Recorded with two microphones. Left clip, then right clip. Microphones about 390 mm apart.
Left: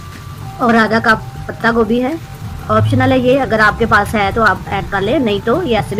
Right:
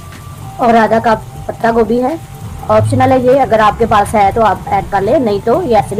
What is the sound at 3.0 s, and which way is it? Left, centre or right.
A woman's voice, right.